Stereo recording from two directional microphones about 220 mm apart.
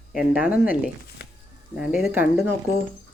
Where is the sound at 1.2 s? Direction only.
50° left (ahead or behind).